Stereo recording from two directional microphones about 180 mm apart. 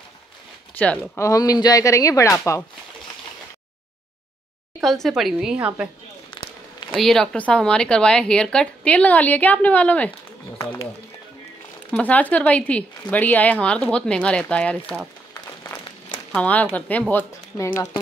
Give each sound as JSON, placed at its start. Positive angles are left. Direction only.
{"t": 0.8, "sound": "speech", "side_deg": 10}
{"t": 4.7, "sound": "speech", "side_deg": 0}
{"t": 6.4, "sound": "a sound", "side_deg": 25}
{"t": 6.9, "sound": "speech", "side_deg": 0}
{"t": 11.9, "sound": "speech", "side_deg": 10}
{"t": 16.3, "sound": "speech", "side_deg": 10}